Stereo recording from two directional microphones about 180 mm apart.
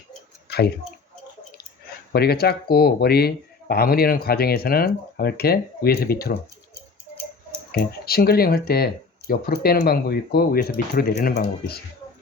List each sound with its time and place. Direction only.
2.1 s speech: 60° left (ahead or behind)
7.7 s speech: 55° left (ahead or behind)